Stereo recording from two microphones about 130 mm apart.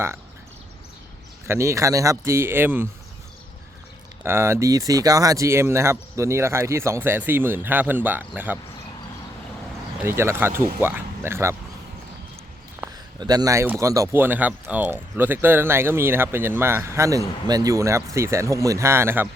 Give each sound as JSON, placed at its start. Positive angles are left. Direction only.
{"t": 1.5, "sound": "speech", "side_deg": -20}
{"t": 4.2, "sound": "speech", "side_deg": -20}
{"t": 10.0, "sound": "speech", "side_deg": -20}
{"t": 12.8, "sound": "a sound", "side_deg": -15}
{"t": 13.1, "sound": "speech", "side_deg": -30}